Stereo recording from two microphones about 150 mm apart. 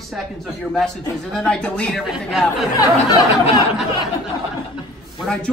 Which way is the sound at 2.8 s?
25° left (ahead or behind).